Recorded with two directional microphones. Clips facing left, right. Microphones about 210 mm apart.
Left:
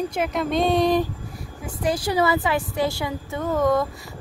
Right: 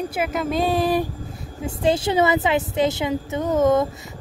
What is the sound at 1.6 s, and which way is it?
A woman's voice, 25° right (ahead or behind).